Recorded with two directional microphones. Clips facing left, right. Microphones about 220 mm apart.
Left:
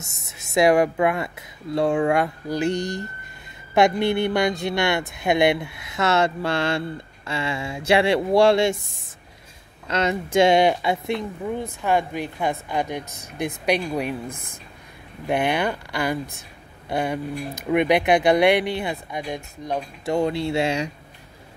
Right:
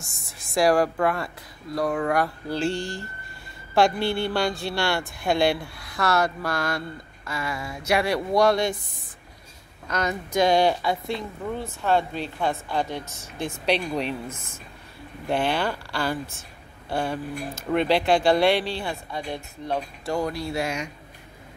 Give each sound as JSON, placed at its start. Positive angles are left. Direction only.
{"t": 0.6, "sound": "speech", "side_deg": 20}
{"t": 9.8, "sound": "speech", "side_deg": 25}
{"t": 15.2, "sound": "speech", "side_deg": 15}
{"t": 20.2, "sound": "speech", "side_deg": 25}